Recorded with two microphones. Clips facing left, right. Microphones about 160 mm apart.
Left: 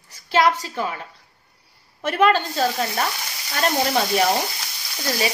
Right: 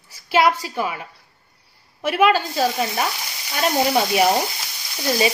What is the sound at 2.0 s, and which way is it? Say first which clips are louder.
Speech: right 1 dB; 10° right (ahead or behind).